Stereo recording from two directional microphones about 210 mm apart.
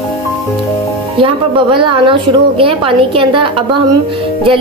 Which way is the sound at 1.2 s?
25° right (ahead or behind).